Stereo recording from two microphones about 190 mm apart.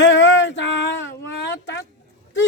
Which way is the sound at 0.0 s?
70° left (ahead or behind).